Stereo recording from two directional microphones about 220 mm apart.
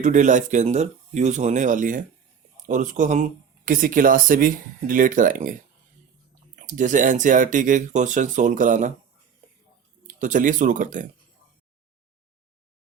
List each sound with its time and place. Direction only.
0.0 s speech: 35° right (ahead or behind)
6.6 s speech: 35° right (ahead or behind)
10.1 s speech: 35° right (ahead or behind)